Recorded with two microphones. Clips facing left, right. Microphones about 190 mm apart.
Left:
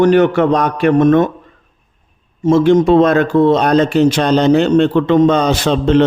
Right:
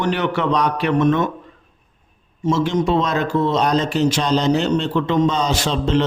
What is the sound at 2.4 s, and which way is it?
A man's voice, 55° left (ahead or behind).